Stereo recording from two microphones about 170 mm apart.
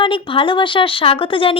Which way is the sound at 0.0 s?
30° left (ahead or behind).